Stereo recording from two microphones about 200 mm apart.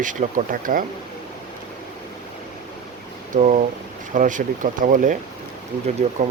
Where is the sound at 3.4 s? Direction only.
40° right (ahead or behind).